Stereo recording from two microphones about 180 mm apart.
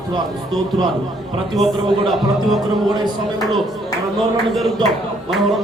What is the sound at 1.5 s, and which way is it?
Speech, centre (ahead or behind).